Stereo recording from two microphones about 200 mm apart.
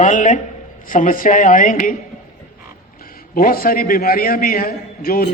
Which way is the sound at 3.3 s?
45° left (ahead or behind).